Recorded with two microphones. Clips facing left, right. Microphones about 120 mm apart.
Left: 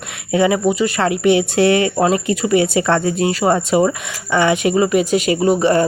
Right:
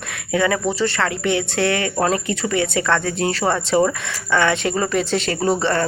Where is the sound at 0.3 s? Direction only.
15° left (ahead or behind).